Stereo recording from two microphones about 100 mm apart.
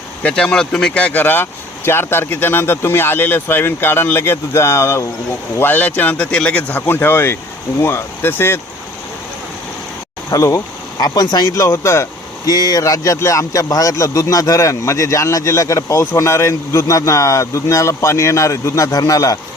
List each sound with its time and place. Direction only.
0.2 s speech: 5° left (ahead or behind); by 8.6 s 25° left (ahead or behind)
10.3 s a man's voice: 35° left (ahead or behind)
12.5 s a man's voice: 40° left (ahead or behind)